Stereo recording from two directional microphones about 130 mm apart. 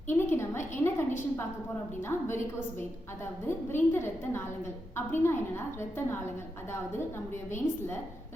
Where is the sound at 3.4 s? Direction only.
20° left (ahead or behind).